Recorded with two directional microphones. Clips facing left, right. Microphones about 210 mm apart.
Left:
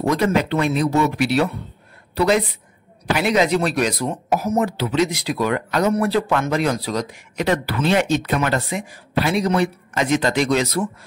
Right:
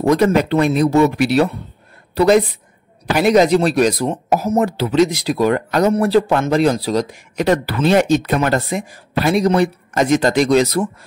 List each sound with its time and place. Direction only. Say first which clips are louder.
0.1 s a woman's voice: right 6 dB; 40° right (ahead or behind)